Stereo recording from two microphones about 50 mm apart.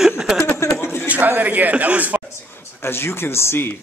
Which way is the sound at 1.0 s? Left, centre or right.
Right.